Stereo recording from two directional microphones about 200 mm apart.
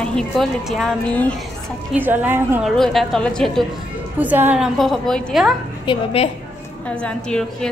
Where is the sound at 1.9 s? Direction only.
10° right (ahead or behind).